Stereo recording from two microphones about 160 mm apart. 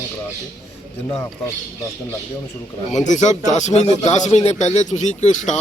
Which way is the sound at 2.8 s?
50° left (ahead or behind).